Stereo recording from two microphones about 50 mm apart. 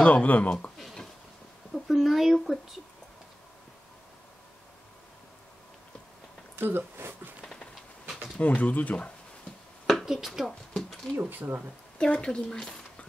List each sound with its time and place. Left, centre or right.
0.0 s speech: left
0.7 s a sound: centre
1.9 s speech: centre
6.5 s a sound: right
8.4 s speech: left
10.0 s speech: centre
10.7 s a sound: centre
11.1 s speech: right
12.0 s speech: centre